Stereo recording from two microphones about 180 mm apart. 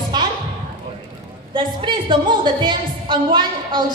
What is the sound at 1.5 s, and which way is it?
A woman's voice, 25° right (ahead or behind).